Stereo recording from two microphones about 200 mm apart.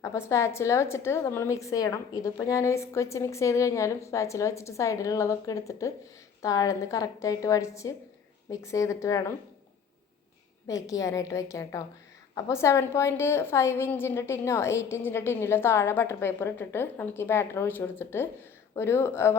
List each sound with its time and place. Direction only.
0.0 s a woman's voice: 15° left (ahead or behind)
10.7 s a woman's voice: 15° left (ahead or behind)